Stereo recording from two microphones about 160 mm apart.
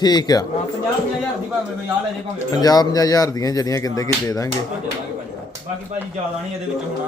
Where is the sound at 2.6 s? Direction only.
25° left (ahead or behind).